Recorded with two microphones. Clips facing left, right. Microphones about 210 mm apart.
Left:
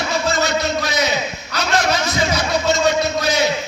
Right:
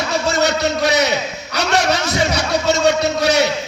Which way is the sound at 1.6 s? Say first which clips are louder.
Right 2 dB; 70° right (ahead or behind).